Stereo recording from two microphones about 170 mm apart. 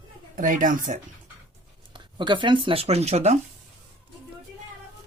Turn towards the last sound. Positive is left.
turn(degrees=-40)  # may be behind; listen again after turning